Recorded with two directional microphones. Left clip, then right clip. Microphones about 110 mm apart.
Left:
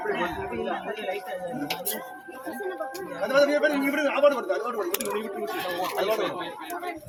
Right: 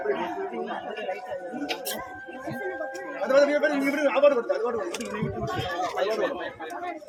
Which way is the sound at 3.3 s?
20° right (ahead or behind).